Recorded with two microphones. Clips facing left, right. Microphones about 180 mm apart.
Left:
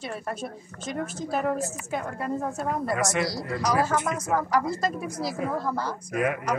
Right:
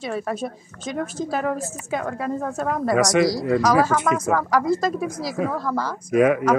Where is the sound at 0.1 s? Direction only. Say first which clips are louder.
Right 9 dB; 90° right.